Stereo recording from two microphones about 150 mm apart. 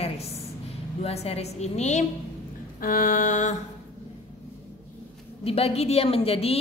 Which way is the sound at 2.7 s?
70° left (ahead or behind).